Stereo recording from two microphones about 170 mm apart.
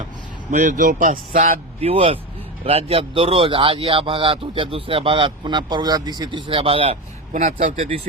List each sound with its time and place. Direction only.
0.5 s speech: 45° right (ahead or behind)
1.9 s speech: 35° right (ahead or behind)
7.3 s speech: 50° right (ahead or behind)